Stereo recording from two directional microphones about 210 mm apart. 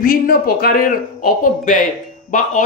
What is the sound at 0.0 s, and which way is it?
Speech, 45° left (ahead or behind).